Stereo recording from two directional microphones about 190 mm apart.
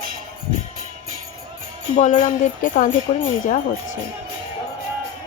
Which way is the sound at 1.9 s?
35° left (ahead or behind).